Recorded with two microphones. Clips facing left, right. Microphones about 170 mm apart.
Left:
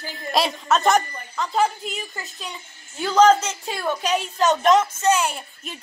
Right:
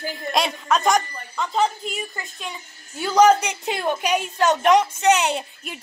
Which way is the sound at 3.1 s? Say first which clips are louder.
Even; 15° right (ahead or behind).